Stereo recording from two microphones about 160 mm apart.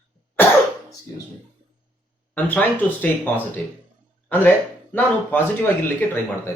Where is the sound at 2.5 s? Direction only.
10° left (ahead or behind).